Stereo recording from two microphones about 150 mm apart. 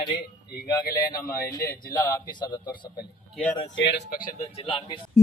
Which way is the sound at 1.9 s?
25° left (ahead or behind).